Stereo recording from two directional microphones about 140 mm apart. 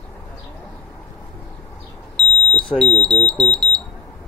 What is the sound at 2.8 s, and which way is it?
Speech, 5° left (ahead or behind).